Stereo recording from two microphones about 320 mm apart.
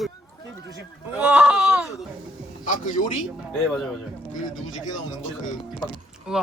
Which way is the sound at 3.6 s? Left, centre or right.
Centre.